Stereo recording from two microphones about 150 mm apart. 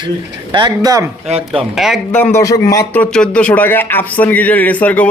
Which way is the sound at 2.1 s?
15° left (ahead or behind).